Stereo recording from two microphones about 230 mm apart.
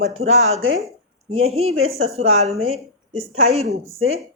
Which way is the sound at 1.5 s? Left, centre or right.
Right.